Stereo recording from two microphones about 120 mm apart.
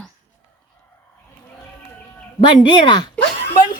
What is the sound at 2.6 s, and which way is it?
Speech, 40° left (ahead or behind).